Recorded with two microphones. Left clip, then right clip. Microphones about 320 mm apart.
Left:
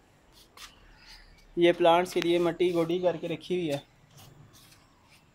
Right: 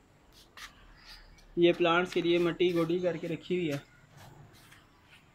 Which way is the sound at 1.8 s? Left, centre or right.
Left.